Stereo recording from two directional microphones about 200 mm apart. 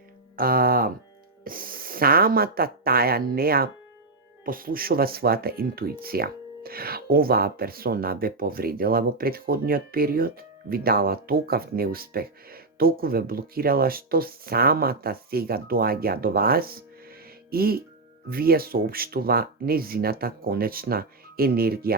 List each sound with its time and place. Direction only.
0.3 s speech: 45° right (ahead or behind)